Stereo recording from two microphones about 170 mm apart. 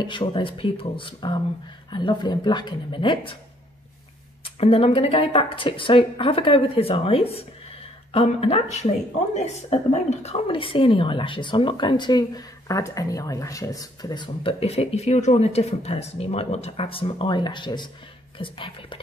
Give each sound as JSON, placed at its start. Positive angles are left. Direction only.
{"t": 0.0, "sound": "speech", "side_deg": 30}
{"t": 4.6, "sound": "speech", "side_deg": 35}